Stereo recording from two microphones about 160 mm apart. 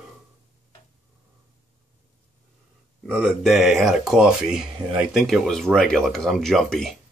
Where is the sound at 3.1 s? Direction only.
Centre (ahead or behind).